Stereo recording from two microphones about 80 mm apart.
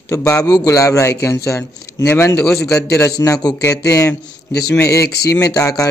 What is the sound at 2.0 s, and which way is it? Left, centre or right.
A man's voice, left.